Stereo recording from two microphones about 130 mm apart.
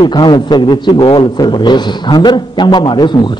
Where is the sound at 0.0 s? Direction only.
35° left (ahead or behind).